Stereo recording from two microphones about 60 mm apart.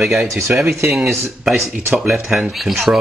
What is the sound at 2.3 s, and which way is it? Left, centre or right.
Speech, centre.